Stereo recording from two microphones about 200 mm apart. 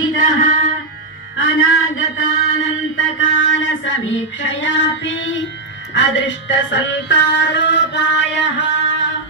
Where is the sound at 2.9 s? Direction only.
75° left (ahead or behind).